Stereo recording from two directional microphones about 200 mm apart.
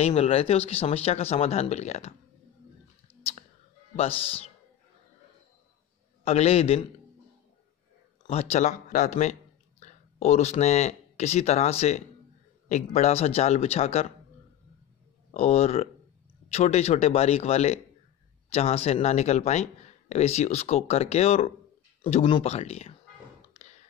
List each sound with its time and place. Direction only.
0.0 s speech: 30° left (ahead or behind)
4.2 s a man's voice: 30° left (ahead or behind)
6.2 s speech: 30° left (ahead or behind)
8.3 s speech: 30° left (ahead or behind)
15.3 s speech: 30° left (ahead or behind)